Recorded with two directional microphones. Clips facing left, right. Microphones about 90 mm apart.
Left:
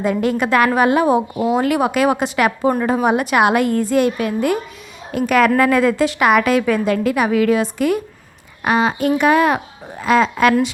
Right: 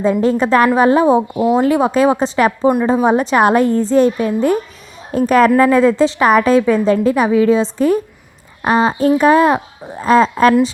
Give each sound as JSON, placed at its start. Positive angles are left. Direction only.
{"t": 0.0, "sound": "a woman's voice", "side_deg": -30}